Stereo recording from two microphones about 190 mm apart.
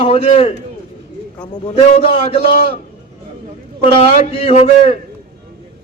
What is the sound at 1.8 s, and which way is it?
Speech, 30° left (ahead or behind).